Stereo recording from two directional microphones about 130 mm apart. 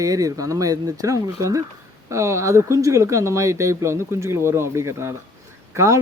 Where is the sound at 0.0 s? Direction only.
25° right (ahead or behind).